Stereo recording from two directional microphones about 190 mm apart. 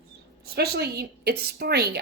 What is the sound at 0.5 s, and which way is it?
Speech, 60° right (ahead or behind).